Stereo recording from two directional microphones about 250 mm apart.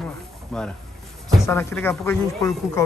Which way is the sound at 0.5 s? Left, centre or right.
Centre.